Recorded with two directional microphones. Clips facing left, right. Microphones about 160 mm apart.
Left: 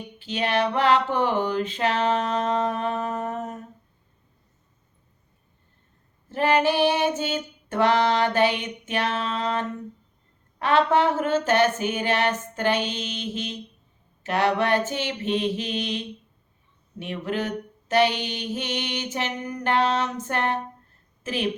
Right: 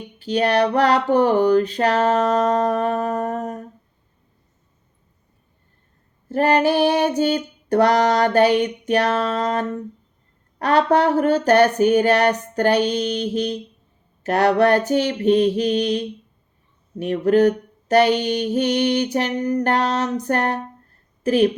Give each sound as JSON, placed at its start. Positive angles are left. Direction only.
{"t": 0.2, "sound": "mantra", "side_deg": -40}
{"t": 6.2, "sound": "mantra", "side_deg": -40}